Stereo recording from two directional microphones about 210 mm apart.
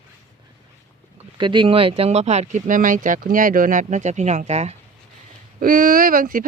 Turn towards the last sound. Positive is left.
turn(degrees=-40)  # may be behind; listen again after turning